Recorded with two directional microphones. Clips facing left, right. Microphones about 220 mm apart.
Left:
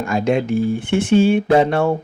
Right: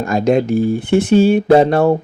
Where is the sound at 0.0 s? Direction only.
40° right (ahead or behind).